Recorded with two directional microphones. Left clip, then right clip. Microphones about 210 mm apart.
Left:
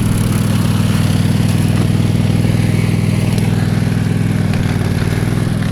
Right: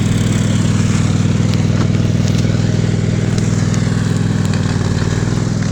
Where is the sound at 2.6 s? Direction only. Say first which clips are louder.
Left 1 dB; 50° left (ahead or behind).